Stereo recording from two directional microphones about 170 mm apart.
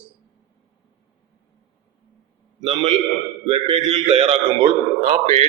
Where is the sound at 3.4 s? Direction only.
30° right (ahead or behind).